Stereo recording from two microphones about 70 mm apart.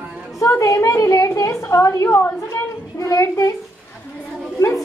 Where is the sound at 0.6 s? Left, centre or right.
Left.